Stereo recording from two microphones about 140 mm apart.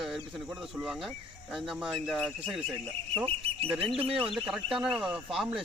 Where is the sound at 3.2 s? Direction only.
45° right (ahead or behind).